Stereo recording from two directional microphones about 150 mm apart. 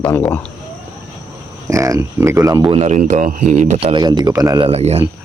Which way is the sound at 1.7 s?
20° right (ahead or behind).